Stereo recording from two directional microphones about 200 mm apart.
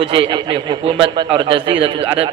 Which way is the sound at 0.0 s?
25° right (ahead or behind).